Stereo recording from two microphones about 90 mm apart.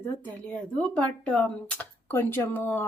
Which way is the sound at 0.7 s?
10° left (ahead or behind).